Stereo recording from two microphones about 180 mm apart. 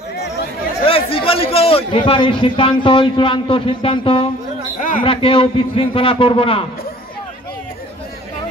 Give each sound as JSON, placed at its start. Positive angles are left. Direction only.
{"t": 0.8, "sound": "a man's voice", "side_deg": 30}
{"t": 4.7, "sound": "a sound", "side_deg": 50}
{"t": 5.0, "sound": "a man's voice", "side_deg": 30}